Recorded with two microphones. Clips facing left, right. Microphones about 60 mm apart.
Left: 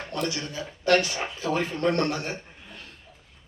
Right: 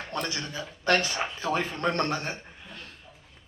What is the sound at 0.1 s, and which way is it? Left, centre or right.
A man's voice, right.